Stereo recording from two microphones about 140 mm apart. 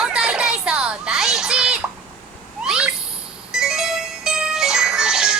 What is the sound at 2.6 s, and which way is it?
Owl, 5° right (ahead or behind).